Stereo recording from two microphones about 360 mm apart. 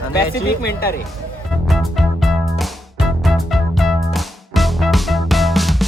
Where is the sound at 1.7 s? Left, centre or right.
Centre.